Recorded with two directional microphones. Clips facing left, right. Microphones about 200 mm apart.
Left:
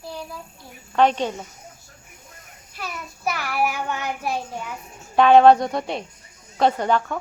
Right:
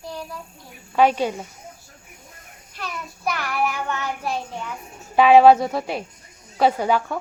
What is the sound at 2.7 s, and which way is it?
Child singing, 5° left (ahead or behind).